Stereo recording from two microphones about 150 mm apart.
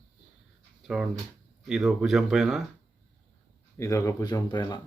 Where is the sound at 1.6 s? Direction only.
Centre (ahead or behind).